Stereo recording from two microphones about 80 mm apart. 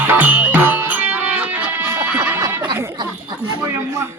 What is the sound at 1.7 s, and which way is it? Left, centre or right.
Music, right.